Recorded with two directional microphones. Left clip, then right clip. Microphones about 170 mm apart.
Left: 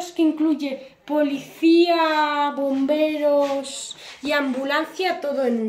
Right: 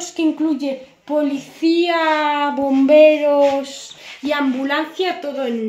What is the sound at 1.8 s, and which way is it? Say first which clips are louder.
Speech: right 4 dB; 50° right (ahead or behind).